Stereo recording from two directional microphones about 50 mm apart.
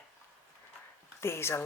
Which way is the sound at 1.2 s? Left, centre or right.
Left.